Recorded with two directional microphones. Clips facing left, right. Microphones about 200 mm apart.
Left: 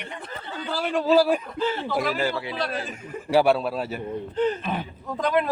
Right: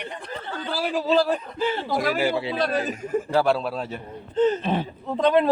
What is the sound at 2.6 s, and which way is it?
Speech, 45° right (ahead or behind).